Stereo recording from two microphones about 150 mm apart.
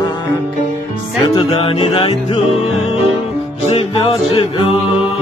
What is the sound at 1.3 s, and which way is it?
Music, 35° left (ahead or behind).